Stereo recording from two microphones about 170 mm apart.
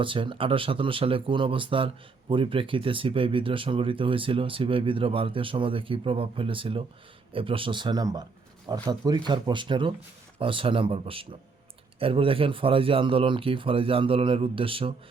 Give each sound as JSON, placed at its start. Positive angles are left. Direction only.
{"t": 0.0, "sound": "speech", "side_deg": -30}